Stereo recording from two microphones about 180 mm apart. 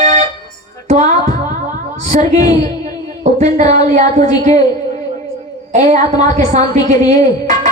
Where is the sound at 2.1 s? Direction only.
45° right (ahead or behind).